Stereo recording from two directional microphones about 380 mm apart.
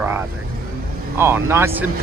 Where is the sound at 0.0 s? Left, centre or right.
Centre.